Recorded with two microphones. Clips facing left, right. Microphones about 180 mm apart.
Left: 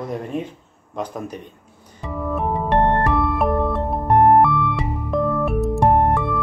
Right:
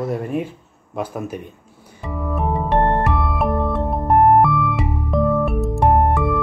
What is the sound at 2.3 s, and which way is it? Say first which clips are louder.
Music: even; centre (ahead or behind).